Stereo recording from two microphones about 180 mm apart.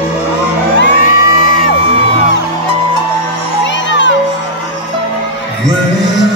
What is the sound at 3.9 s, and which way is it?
Music, 90° left.